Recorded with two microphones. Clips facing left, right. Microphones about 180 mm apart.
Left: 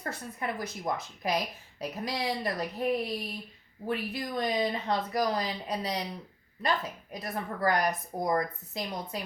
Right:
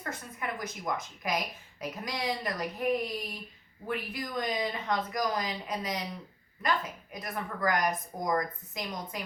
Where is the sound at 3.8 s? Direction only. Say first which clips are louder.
Left 3 dB; 30° left (ahead or behind).